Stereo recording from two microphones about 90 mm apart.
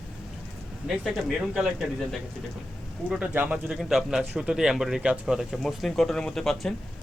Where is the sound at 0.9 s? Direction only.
10° right (ahead or behind).